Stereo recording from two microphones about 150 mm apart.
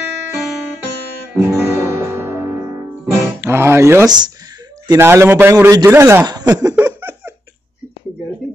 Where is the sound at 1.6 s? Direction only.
15° right (ahead or behind).